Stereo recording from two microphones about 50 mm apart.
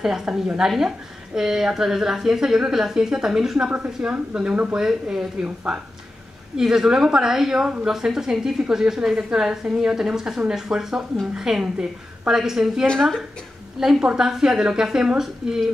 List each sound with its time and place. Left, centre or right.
0.0 s a woman's voice: centre
4.7 s a woman's voice: centre
6.5 s a woman's voice: centre